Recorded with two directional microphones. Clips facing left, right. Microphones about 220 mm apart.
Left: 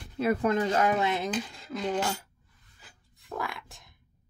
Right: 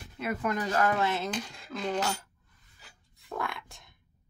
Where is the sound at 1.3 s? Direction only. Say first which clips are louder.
Left 3 dB; 5° left (ahead or behind).